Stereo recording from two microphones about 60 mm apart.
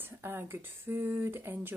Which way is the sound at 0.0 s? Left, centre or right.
Right.